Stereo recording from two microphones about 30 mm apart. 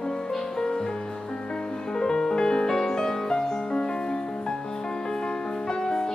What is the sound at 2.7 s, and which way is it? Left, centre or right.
Music, centre.